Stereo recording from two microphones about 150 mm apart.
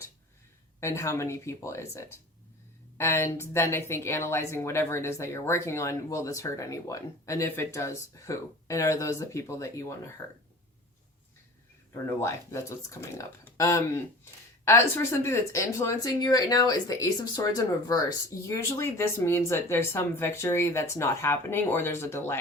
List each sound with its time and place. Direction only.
0.8 s speech: 20° left (ahead or behind)
12.2 s speech: 20° left (ahead or behind)